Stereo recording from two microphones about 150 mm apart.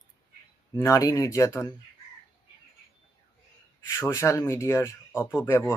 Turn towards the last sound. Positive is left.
turn(degrees=15)  # may be behind; listen again after turning